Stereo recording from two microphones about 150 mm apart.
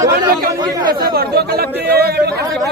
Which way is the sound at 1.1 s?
90° right.